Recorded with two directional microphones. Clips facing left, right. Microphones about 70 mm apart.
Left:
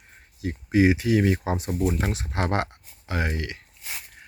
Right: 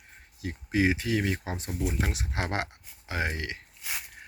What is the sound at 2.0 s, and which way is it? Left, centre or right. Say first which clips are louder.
Speech: left 4 dB; centre.